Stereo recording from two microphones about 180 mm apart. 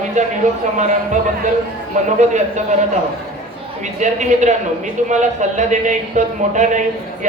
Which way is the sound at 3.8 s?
40° right (ahead or behind).